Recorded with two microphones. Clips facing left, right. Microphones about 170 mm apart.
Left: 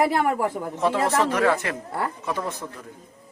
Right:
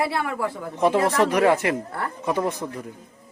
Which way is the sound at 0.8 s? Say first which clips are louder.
Right 3 dB; 15° right (ahead or behind).